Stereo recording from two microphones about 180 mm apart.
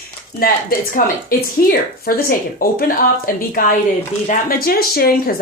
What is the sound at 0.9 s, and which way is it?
Speech, 50° left (ahead or behind).